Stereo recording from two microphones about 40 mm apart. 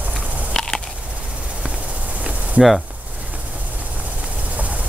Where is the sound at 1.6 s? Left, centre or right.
Right.